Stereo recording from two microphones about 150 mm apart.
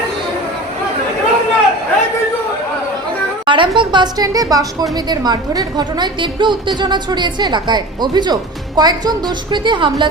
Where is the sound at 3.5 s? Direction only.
30° right (ahead or behind).